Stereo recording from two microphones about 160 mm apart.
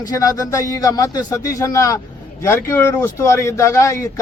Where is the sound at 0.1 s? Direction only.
20° left (ahead or behind).